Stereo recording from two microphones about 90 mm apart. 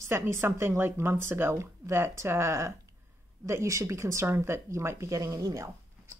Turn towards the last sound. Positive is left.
turn(degrees=-30)  # may be behind; listen again after turning